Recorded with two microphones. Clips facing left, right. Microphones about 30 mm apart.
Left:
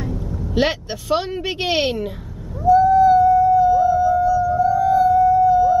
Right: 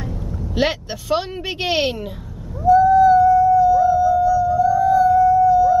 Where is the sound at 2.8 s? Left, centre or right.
Centre.